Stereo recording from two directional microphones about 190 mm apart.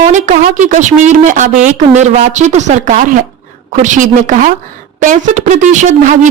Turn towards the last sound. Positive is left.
turn(degrees=-40)  # may be behind; listen again after turning